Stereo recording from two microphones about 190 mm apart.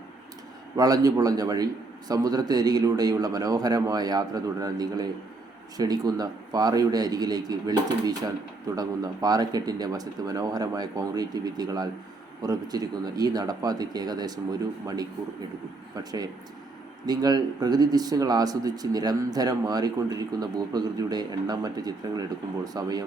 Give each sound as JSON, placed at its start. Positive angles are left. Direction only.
{"t": 0.8, "sound": "speech", "side_deg": -20}
{"t": 17.1, "sound": "speech", "side_deg": -20}